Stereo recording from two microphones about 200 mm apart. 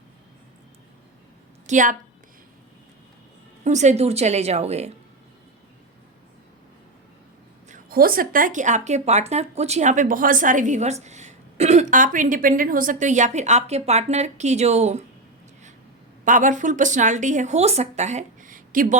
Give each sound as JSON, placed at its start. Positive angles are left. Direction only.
{"t": 1.6, "sound": "a woman's voice", "side_deg": -40}
{"t": 3.6, "sound": "speech", "side_deg": -35}
{"t": 7.7, "sound": "speech", "side_deg": -45}
{"t": 16.2, "sound": "speech", "side_deg": -40}